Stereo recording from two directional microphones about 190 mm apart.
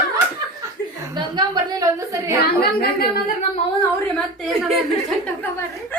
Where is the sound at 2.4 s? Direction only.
55° left (ahead or behind).